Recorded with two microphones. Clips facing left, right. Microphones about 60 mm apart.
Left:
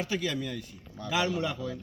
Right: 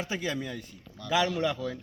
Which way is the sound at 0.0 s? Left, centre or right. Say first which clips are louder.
Left 1 dB; right.